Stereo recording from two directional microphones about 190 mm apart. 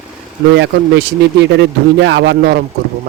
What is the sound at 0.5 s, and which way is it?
Speech, 65° right (ahead or behind).